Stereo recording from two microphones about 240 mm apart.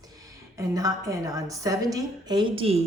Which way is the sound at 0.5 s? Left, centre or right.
Centre.